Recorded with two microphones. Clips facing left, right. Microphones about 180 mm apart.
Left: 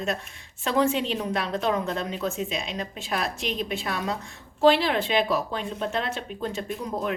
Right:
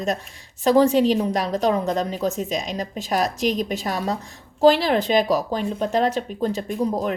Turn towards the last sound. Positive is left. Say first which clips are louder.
# right 6 dB
turn(degrees=-40)  # may be behind; listen again after turning